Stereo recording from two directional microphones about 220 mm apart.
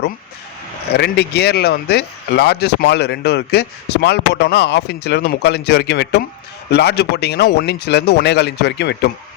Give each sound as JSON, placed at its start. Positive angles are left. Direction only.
{"t": 0.9, "sound": "speech", "side_deg": 50}